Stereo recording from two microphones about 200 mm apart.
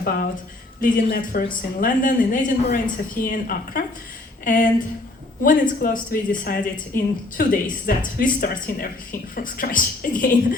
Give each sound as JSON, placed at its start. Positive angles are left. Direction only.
{"t": 0.0, "sound": "speech", "side_deg": 50}